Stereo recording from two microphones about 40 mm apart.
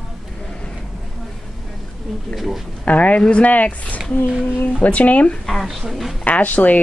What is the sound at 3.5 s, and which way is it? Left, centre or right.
Speech, left.